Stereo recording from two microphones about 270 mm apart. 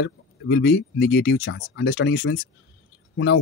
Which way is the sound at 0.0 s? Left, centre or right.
Left.